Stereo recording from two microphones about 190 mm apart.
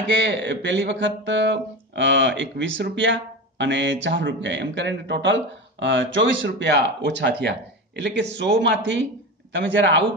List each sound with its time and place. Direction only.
0.2 s speech: 70° right (ahead or behind)